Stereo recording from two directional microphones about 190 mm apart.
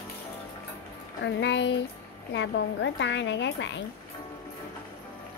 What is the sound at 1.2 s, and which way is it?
A woman's voice, 70° left (ahead or behind).